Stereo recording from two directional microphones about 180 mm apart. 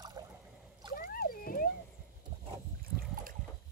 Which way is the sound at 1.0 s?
55° left (ahead or behind).